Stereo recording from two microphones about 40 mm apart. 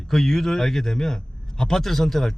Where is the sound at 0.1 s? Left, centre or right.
Centre.